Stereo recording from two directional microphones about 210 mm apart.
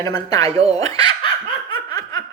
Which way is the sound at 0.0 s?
15° left (ahead or behind).